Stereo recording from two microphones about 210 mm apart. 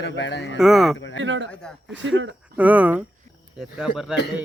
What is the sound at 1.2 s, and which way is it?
Speech, 60° right (ahead or behind).